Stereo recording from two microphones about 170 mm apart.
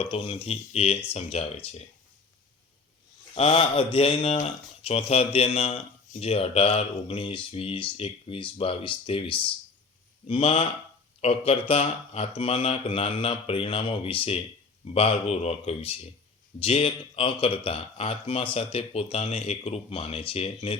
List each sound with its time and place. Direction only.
0.0 s speech: 35° left (ahead or behind)
3.3 s speech: 35° left (ahead or behind)